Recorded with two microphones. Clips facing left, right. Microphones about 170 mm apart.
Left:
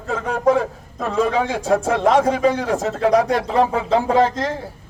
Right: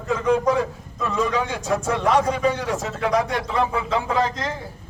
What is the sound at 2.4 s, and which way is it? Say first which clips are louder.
Speech: left 4 dB; 35° left (ahead or behind).